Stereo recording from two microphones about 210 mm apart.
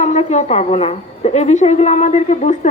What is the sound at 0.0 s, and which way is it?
A woman's voice, 35° left (ahead or behind).